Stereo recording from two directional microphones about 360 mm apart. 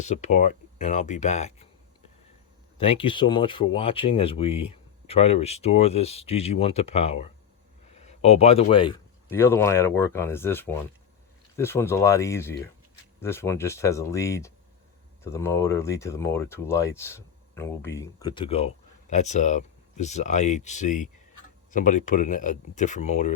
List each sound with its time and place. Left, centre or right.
0.0 s speech: centre
2.7 s speech: centre